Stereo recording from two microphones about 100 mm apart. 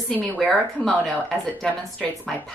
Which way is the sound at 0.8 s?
5° left (ahead or behind).